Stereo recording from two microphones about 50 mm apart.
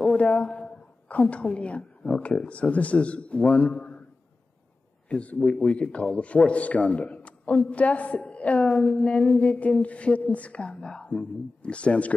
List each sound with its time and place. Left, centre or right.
0.2 s a woman's voice: left
5.1 s a woman's voice: left
5.4 s a woman's voice: centre